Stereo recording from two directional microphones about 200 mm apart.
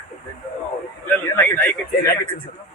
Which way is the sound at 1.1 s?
10° left (ahead or behind).